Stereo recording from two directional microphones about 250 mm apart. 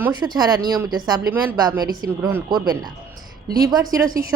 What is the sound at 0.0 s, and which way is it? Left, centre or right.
A woman's voice, centre.